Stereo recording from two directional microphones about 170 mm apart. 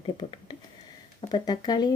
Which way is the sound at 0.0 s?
25° left (ahead or behind).